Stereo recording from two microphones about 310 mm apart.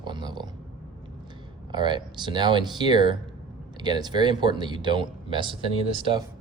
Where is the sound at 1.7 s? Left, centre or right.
Centre.